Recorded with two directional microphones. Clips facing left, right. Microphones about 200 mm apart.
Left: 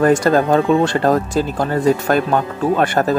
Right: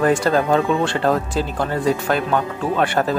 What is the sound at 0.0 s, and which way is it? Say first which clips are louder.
Speech: left 4 dB; 45° left (ahead or behind).